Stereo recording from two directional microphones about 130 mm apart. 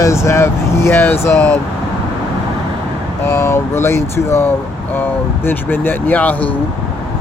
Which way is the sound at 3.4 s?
20° left (ahead or behind).